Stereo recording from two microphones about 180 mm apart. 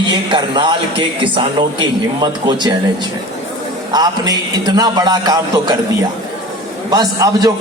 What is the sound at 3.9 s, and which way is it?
A man's voice, 20° right (ahead or behind).